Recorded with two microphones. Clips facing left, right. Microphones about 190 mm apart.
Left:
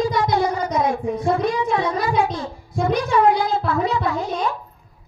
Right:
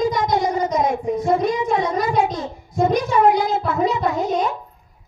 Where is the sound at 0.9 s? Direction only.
20° right (ahead or behind).